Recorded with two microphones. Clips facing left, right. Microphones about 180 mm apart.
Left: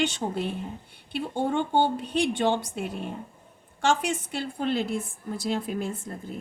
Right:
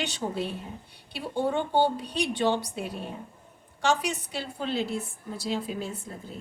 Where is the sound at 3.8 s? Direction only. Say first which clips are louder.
Left 2 dB; 50° left (ahead or behind).